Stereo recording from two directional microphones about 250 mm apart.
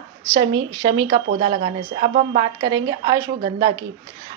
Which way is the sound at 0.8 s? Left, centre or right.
Centre.